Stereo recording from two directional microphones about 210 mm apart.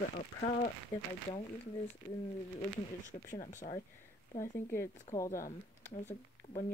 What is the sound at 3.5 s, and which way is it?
Speech, 35° left (ahead or behind).